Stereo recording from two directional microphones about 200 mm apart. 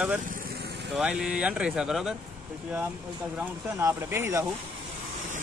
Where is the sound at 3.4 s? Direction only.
10° right (ahead or behind).